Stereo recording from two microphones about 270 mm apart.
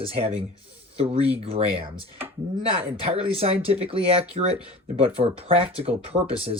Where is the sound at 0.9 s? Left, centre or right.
Right.